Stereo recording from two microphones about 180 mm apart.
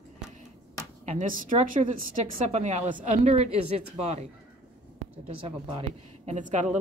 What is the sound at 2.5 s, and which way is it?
A woman's voice, 40° right (ahead or behind).